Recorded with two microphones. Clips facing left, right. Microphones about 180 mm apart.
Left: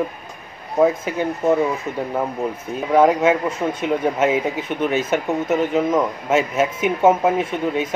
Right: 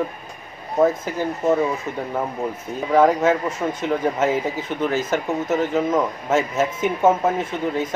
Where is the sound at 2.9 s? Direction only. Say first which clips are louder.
Left 1 dB; 15° left (ahead or behind).